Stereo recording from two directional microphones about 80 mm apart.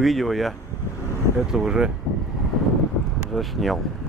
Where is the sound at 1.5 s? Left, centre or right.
Centre.